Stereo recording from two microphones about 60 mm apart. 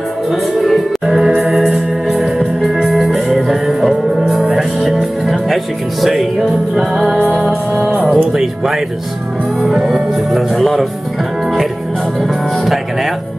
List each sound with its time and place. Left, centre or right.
0.3 s music: centre
6.4 s speech: centre
7.7 s music: right
8.1 s music: centre
9.6 s speech: centre
12.2 s music: centre